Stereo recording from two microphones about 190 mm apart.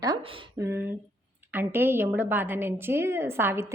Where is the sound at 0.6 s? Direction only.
15° right (ahead or behind).